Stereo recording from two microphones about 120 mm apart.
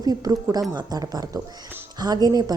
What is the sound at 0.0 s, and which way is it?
A woman's voice, 35° right (ahead or behind).